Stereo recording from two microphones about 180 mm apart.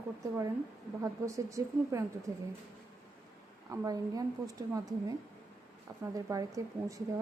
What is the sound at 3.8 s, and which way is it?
Speech, 20° right (ahead or behind).